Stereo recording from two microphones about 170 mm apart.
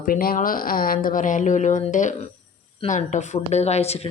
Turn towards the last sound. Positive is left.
turn(degrees=40)  # may be behind; listen again after turning